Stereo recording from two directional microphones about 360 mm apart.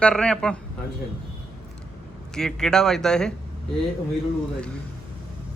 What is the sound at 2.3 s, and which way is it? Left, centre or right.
Speech, centre.